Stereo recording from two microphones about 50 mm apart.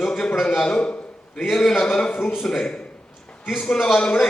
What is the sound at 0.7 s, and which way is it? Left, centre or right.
Speech, left.